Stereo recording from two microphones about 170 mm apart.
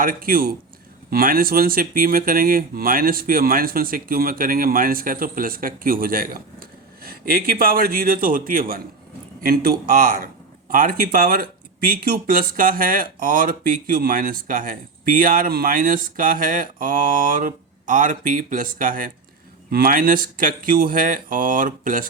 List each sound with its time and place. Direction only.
0.0 s speech: 55° right (ahead or behind)